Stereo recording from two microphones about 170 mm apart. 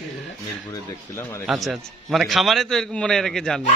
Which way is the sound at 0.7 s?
15° left (ahead or behind).